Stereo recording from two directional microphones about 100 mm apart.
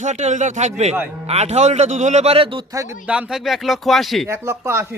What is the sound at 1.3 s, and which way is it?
A man's voice, 90° right.